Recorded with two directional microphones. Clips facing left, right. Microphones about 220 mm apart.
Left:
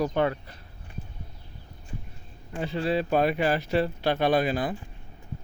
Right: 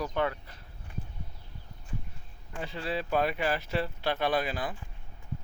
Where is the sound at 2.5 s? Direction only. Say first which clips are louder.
Left 7 dB; 35° left (ahead or behind).